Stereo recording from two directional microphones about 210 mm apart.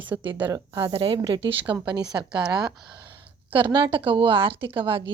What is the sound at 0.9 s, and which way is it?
Speech, 25° right (ahead or behind).